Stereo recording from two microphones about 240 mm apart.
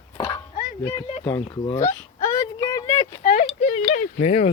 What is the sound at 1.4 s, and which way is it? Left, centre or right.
Speech, centre.